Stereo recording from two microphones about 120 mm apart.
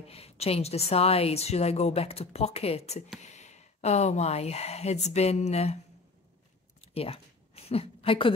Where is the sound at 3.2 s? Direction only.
70° left (ahead or behind).